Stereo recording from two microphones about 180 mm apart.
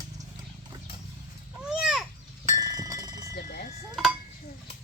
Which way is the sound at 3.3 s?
55° left (ahead or behind).